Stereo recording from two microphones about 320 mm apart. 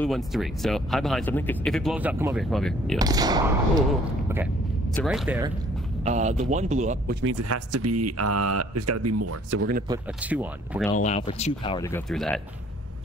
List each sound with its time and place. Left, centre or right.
0.0 s speech: centre
3.0 s speech: centre
4.9 s speech: centre
6.0 s speech: right
7.4 s speech: right
9.8 s speech: centre
10.9 s speech: centre